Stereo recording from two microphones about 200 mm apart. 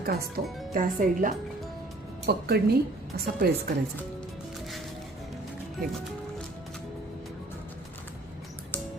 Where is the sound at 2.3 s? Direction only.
55° right (ahead or behind).